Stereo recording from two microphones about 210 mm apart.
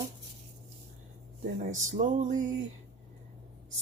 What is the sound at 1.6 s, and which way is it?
Music, 35° right (ahead or behind).